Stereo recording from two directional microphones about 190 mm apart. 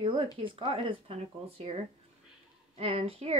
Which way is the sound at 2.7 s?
30° right (ahead or behind).